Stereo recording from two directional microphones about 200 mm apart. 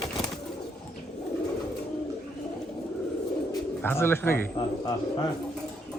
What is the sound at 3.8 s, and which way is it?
Speech, 10° left (ahead or behind).